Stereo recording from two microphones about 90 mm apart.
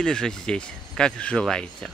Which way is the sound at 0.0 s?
10° left (ahead or behind).